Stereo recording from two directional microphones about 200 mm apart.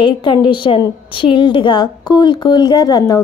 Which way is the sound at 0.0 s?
25° left (ahead or behind).